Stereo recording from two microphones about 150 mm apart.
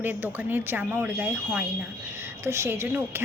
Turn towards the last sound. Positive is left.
turn(degrees=-15)  # may be behind; listen again after turning